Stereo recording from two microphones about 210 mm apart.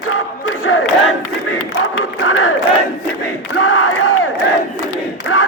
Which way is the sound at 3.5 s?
90° left.